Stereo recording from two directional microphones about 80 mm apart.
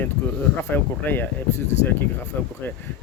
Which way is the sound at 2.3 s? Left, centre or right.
Left.